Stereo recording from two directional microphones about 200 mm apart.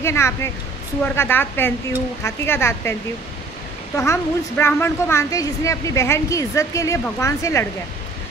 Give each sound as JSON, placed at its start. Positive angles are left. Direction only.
{"t": 0.0, "sound": "a woman's voice", "side_deg": 15}